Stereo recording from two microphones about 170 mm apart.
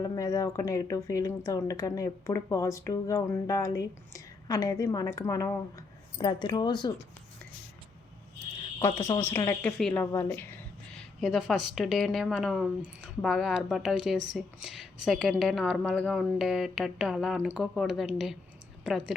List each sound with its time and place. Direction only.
0.0 s speech: 20° left (ahead or behind)
8.8 s a woman's voice: 15° left (ahead or behind)
10.9 s a woman's voice: centre (ahead or behind)